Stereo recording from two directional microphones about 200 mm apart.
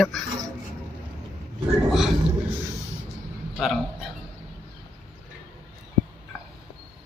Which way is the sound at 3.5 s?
Centre (ahead or behind).